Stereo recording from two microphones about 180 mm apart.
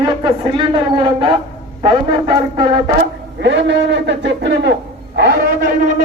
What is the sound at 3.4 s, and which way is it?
A man's voice, 80° right.